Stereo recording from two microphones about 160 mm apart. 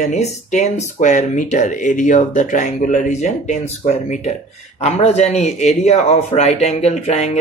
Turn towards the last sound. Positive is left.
turn(degrees=45)  # may be behind; listen again after turning